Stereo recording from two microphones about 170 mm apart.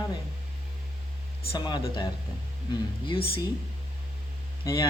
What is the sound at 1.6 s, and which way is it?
Speech, 25° left (ahead or behind).